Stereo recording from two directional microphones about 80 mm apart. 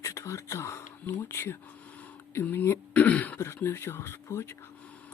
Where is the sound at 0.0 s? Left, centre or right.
Left; by 3.4 s centre.